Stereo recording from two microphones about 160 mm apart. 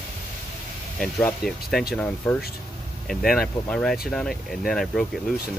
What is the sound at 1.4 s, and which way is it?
Speech, 75° left (ahead or behind).